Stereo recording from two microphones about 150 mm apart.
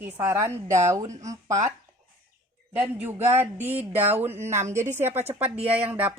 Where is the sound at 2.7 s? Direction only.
10° right (ahead or behind).